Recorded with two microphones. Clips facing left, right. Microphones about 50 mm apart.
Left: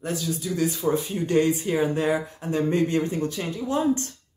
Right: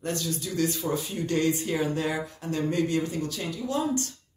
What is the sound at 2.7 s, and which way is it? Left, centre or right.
Speech, left.